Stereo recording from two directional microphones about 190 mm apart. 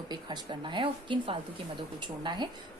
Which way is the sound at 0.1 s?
20° right (ahead or behind).